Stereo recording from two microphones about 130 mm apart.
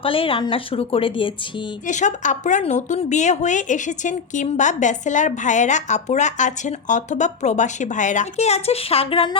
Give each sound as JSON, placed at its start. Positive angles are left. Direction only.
{"t": 0.0, "sound": "a woman's voice", "side_deg": 45}
{"t": 1.9, "sound": "speech", "side_deg": 70}